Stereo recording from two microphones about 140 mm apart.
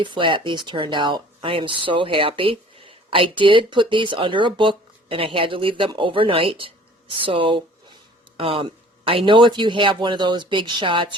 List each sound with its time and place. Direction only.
0.0 s speech: 35° right (ahead or behind)